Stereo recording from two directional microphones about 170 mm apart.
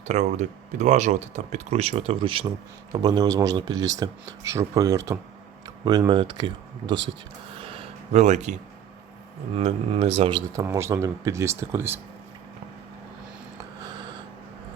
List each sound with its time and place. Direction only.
0.0 s speech: 45° right (ahead or behind); by 6.2 s 25° right (ahead or behind)
6.8 s speech: 90° right
7.6 s a sound: 30° right (ahead or behind)
9.6 s speech: 35° right (ahead or behind)
10.5 s speech: 20° right (ahead or behind)
13.8 s a sound: 25° right (ahead or behind)